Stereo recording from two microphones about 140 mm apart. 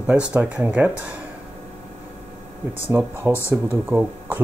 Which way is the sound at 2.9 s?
15° right (ahead or behind).